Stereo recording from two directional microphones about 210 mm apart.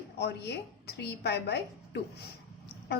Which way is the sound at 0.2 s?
50° left (ahead or behind).